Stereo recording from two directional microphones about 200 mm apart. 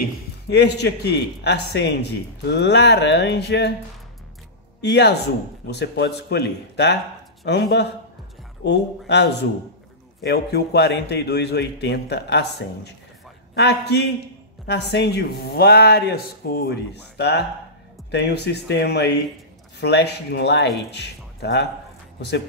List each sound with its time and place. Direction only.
0.5 s a man's voice: 55° left (ahead or behind)
4.8 s a man's voice: 55° left (ahead or behind)